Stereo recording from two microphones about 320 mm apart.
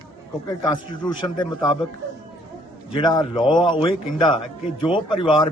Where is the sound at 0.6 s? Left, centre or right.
Centre.